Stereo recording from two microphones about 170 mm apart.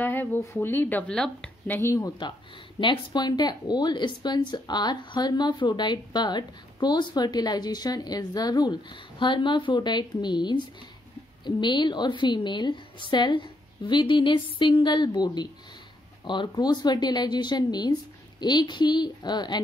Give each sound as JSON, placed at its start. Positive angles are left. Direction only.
{"t": 0.0, "sound": "a woman's voice", "side_deg": 10}
{"t": 1.8, "sound": "speech", "side_deg": 15}